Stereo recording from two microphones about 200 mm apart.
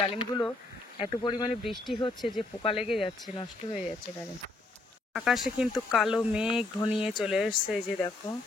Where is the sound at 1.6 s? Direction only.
Centre (ahead or behind).